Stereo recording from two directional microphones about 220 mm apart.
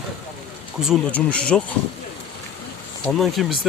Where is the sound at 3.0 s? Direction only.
Centre (ahead or behind).